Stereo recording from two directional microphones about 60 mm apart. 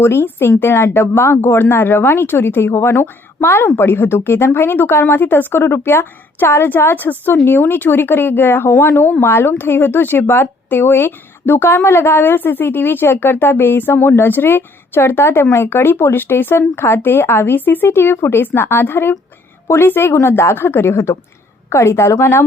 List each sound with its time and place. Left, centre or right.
0.0 s a woman's voice: left